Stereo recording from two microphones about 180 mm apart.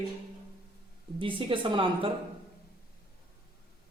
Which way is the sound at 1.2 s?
30° right (ahead or behind).